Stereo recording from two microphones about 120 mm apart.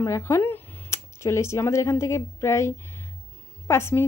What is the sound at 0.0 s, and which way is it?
A woman's voice, 25° left (ahead or behind).